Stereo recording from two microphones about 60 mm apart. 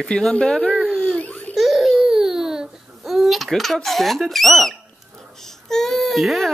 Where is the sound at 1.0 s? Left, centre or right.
Left.